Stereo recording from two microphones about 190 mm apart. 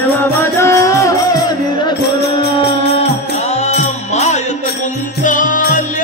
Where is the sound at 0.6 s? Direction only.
15° left (ahead or behind).